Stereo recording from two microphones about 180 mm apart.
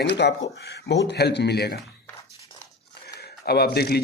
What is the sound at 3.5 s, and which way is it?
Speech, 60° left (ahead or behind).